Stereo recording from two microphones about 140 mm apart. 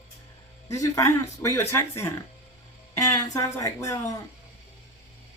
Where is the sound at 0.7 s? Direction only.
25° left (ahead or behind).